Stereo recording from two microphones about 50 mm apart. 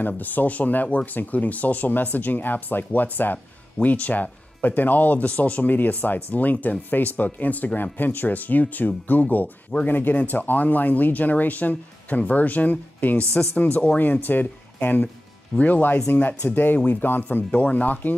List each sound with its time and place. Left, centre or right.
0.0 s speech: left
17.5 s speech: left